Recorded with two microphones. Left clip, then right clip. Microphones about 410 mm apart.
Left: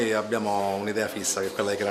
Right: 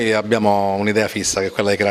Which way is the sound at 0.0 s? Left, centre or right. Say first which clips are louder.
Right 9 dB; right.